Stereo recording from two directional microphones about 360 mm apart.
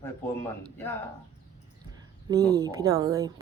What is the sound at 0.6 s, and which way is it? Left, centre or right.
Speech, centre.